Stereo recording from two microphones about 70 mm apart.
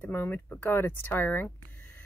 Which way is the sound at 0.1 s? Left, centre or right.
Left.